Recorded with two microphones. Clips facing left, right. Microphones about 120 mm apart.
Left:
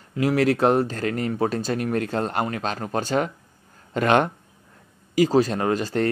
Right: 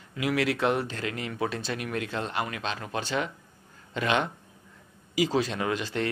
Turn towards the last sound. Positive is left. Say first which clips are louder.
# left 6 dB
turn(degrees=40)  # may be behind; listen again after turning